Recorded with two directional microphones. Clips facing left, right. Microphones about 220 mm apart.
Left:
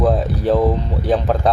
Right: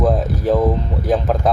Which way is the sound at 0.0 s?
Centre (ahead or behind).